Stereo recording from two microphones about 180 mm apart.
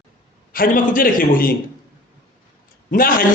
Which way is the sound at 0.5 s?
50° left (ahead or behind).